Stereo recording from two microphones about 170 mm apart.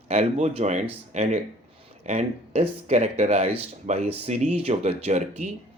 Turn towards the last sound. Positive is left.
turn(degrees=-40)  # may be behind; listen again after turning